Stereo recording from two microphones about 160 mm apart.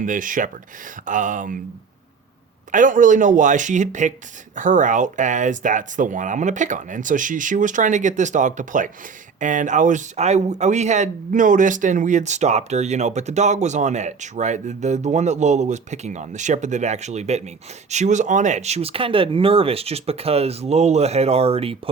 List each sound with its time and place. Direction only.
0.0 s speech: 55° right (ahead or behind)
2.7 s speech: 55° right (ahead or behind); by 21.8 s 35° right (ahead or behind)